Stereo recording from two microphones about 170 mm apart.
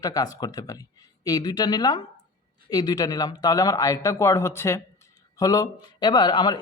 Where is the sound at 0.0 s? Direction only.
20° left (ahead or behind).